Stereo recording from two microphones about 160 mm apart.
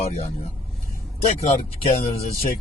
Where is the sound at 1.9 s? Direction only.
40° left (ahead or behind).